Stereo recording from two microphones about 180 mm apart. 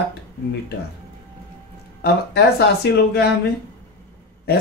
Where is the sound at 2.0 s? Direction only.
65° left (ahead or behind).